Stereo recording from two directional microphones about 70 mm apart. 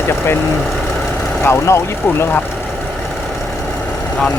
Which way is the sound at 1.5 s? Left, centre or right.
Left.